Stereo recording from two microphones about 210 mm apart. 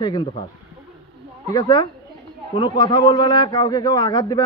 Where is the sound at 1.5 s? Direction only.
20° left (ahead or behind).